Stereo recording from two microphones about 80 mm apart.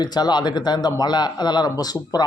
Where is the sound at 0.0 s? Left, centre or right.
Left.